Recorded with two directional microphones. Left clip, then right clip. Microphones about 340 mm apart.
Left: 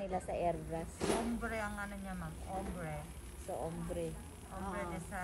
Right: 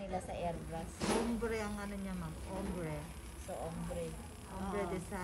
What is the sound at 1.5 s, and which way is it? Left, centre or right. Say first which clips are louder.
Speech: even; centre.